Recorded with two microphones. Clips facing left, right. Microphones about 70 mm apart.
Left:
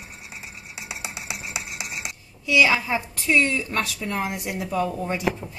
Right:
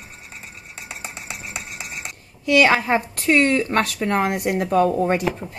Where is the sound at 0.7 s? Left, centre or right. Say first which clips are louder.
Even; centre.